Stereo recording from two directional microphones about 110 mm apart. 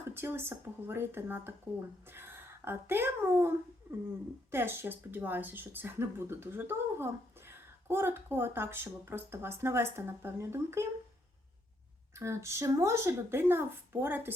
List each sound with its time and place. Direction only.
0.1 s speech: 20° right (ahead or behind)
4.5 s speech: 20° right (ahead or behind)
12.1 s speech: 25° right (ahead or behind)